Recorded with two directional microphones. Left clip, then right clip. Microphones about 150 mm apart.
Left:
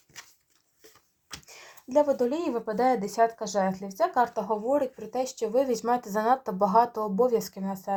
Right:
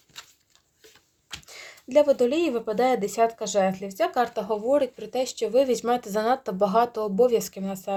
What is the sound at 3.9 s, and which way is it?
Speech, 35° right (ahead or behind).